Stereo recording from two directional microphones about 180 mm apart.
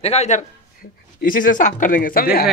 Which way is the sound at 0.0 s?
35° left (ahead or behind).